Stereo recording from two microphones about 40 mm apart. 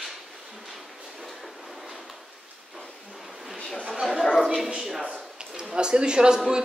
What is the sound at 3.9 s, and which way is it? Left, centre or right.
Dog, centre.